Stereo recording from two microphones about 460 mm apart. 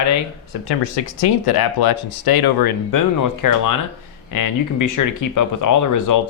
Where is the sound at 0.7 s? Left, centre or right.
Left.